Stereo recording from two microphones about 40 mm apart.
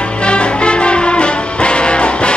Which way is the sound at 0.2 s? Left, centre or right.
Left.